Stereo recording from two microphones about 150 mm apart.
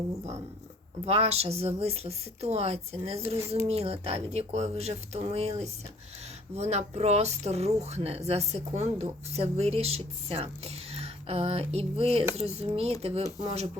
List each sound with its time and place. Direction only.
1.0 s speech: 45° right (ahead or behind)